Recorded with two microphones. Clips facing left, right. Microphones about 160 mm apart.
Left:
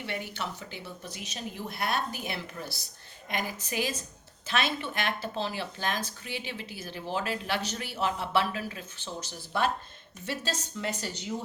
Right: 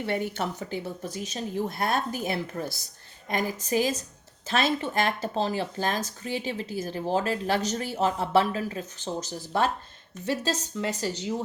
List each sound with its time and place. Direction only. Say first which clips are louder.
0.0 s speech: right 7 dB; 50° right (ahead or behind)